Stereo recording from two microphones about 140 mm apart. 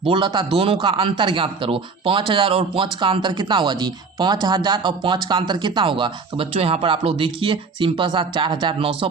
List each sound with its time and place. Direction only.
0.0 s speech: 35° right (ahead or behind)